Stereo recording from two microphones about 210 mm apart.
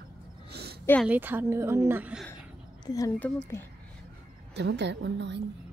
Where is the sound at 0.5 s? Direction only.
50° right (ahead or behind).